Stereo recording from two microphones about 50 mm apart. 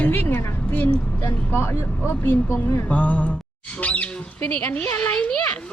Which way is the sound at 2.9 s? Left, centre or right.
Left.